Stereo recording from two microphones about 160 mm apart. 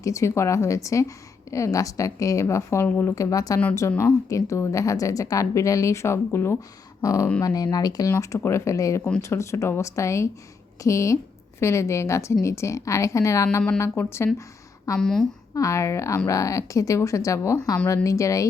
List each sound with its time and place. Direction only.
0.0 s a woman's voice: 20° left (ahead or behind)
14.9 s a woman's voice: 5° left (ahead or behind)
15.5 s a woman's voice: 20° left (ahead or behind)